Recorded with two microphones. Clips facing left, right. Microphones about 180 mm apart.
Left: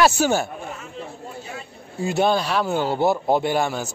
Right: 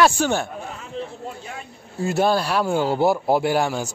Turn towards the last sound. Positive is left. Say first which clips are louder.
# right 1 dB
turn(degrees=-10)  # may be behind; listen again after turning